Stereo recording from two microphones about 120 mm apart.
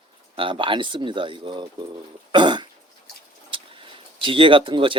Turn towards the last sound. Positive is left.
turn(degrees=-45)  # may be behind; listen again after turning